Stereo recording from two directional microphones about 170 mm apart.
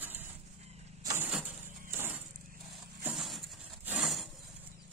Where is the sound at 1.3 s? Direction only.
5° right (ahead or behind).